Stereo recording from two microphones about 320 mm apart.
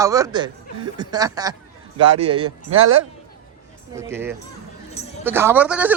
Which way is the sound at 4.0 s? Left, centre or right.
Centre.